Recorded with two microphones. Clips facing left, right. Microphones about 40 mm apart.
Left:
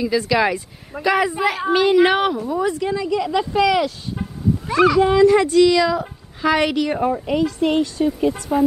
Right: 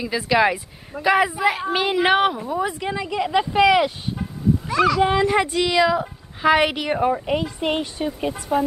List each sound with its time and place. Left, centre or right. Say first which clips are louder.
0.0 s a woman's voice: left 1 dB; centre
4.2 s a sound: even; centre
5.0 s a woman's voice: left 5 dB; centre
8.3 s a woman's voice: left 3 dB; centre